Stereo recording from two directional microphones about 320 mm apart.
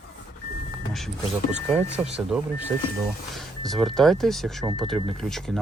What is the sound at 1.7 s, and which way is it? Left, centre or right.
Speech, centre.